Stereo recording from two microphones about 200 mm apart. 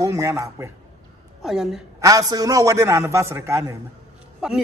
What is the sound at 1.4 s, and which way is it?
Speech, centre (ahead or behind).